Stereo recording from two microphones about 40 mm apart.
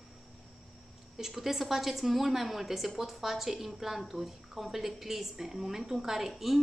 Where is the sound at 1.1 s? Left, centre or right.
Centre.